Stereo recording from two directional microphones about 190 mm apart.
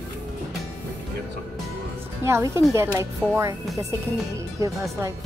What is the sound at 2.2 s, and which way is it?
Speech, 15° right (ahead or behind).